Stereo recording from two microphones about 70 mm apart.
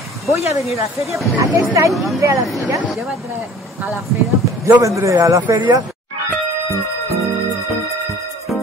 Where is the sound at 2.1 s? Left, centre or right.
Right.